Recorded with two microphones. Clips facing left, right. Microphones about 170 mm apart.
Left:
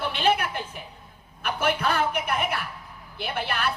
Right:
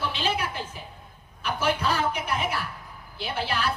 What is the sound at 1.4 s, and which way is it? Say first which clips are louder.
A man's voice: left 1 dB; 55° left (ahead or behind).